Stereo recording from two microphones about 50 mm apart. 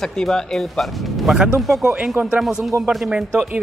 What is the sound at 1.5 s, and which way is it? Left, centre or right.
Speech, centre.